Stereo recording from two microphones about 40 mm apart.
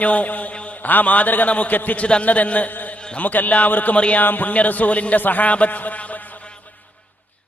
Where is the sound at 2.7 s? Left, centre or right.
Left.